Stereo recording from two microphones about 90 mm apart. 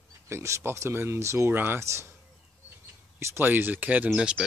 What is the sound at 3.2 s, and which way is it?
Speech, 25° right (ahead or behind).